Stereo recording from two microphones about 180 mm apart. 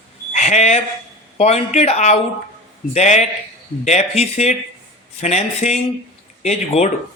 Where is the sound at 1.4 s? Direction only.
35° left (ahead or behind).